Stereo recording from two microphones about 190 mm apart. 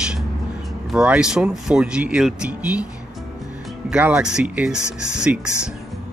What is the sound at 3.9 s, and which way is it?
Speech, 5° right (ahead or behind).